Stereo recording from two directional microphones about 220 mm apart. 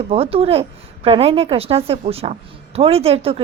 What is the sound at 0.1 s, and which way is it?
A woman's voice, 25° right (ahead or behind).